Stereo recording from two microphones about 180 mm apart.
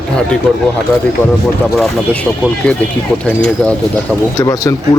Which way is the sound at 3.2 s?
5° left (ahead or behind).